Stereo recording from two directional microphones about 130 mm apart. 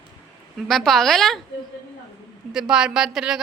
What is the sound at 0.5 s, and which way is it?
Speech, centre (ahead or behind).